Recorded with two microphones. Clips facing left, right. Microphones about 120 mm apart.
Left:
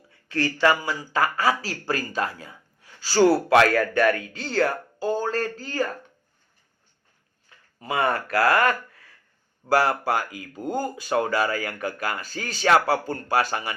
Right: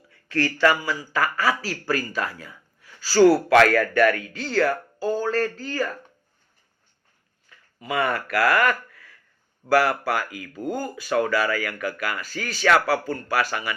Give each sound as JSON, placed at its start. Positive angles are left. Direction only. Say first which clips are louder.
{"t": 0.1, "sound": "speech", "louder": "right 1 dB", "side_deg": 20}
{"t": 7.5, "sound": "speech", "louder": "right 1 dB", "side_deg": 30}